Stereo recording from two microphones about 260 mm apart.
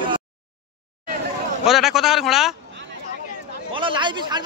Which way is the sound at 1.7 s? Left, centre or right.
Centre.